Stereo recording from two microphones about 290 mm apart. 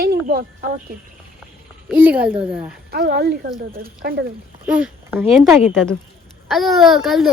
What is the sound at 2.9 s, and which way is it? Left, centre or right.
Speech, right.